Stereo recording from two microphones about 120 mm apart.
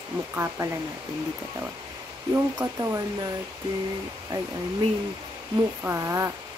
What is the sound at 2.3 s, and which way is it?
Speech, 25° right (ahead or behind).